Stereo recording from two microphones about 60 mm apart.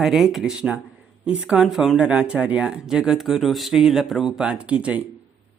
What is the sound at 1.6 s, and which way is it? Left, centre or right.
Speech, centre.